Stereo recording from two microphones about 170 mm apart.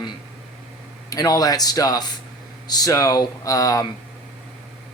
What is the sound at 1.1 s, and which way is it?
Speech, 20° left (ahead or behind).